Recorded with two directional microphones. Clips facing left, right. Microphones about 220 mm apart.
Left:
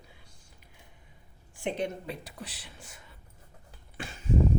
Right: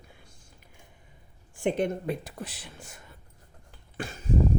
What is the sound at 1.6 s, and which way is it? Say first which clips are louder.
A woman's voice: right 6 dB; 50° right (ahead or behind).